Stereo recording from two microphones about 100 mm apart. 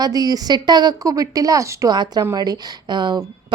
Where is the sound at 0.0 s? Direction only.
40° right (ahead or behind).